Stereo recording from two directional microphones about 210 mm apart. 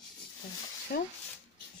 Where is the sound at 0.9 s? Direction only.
50° left (ahead or behind).